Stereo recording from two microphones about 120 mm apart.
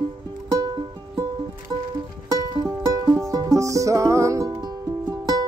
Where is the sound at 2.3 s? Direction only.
35° right (ahead or behind).